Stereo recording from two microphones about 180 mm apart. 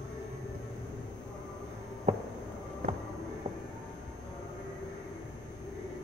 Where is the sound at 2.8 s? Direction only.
55° right (ahead or behind).